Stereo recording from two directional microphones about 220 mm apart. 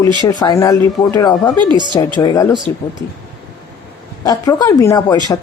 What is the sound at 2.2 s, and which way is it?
Speech, 15° left (ahead or behind).